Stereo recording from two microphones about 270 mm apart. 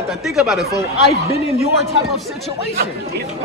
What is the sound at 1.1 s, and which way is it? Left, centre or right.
Speech, left.